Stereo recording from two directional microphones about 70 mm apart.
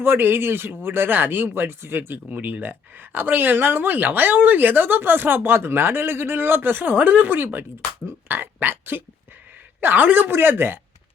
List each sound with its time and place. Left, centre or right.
0.0 s speech: right